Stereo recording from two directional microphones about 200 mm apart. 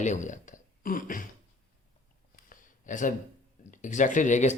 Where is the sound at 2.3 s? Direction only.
40° left (ahead or behind).